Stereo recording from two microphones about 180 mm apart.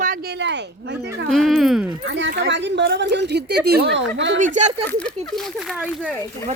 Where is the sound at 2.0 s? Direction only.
85° right.